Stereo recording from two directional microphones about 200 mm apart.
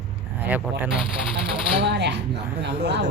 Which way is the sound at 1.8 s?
60° right (ahead or behind).